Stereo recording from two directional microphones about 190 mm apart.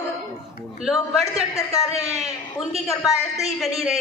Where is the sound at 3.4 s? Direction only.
Centre (ahead or behind).